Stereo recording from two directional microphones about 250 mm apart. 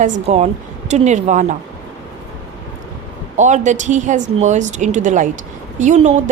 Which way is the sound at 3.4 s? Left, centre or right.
Right.